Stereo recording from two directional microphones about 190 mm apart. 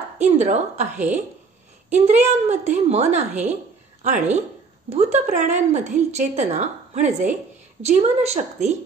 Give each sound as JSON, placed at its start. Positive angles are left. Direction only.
{"t": 0.2, "sound": "a woman's voice", "side_deg": -35}
{"t": 1.9, "sound": "a woman's voice", "side_deg": -35}